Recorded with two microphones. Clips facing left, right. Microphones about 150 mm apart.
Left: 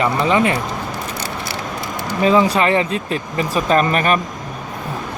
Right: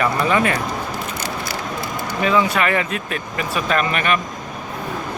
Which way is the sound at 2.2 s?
30° left (ahead or behind).